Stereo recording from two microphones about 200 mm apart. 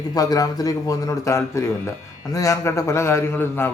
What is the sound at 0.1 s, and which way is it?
A man's voice, 20° left (ahead or behind).